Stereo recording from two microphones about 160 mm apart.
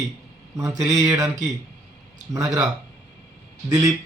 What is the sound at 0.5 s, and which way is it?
Speech, 20° right (ahead or behind).